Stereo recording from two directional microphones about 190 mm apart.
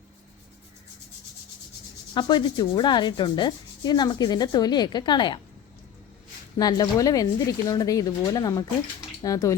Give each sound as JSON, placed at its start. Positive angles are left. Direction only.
{"t": 2.1, "sound": "rub", "side_deg": 25}
{"t": 6.6, "sound": "rub", "side_deg": 20}
{"t": 9.2, "sound": "speech", "side_deg": 15}